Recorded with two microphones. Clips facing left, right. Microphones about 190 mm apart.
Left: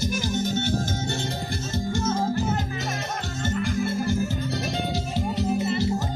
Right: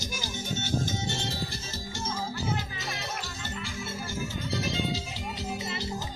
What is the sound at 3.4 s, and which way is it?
Music, 55° left (ahead or behind).